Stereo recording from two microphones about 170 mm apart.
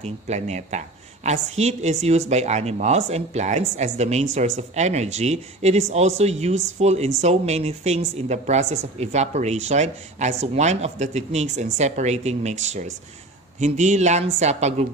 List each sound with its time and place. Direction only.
0.0 s speech: 40° right (ahead or behind)